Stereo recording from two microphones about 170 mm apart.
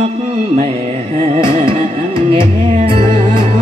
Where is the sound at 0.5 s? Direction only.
35° right (ahead or behind).